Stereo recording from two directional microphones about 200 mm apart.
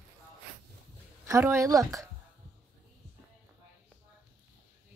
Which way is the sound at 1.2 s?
15° right (ahead or behind).